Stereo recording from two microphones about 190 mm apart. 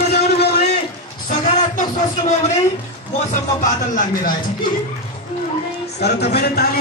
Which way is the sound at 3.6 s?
45° left (ahead or behind).